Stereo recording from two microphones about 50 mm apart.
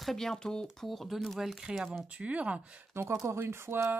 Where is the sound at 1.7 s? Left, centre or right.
Centre.